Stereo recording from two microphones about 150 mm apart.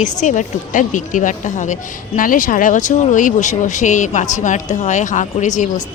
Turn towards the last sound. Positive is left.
turn(degrees=55)  # may be behind; listen again after turning